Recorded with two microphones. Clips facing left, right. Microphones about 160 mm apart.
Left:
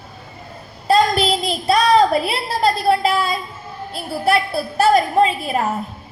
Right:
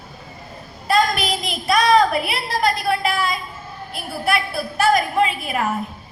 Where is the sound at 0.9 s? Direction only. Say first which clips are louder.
Left 4 dB; 30° left (ahead or behind).